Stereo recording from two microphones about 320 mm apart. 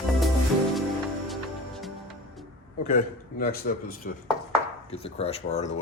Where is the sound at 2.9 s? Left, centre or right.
Left.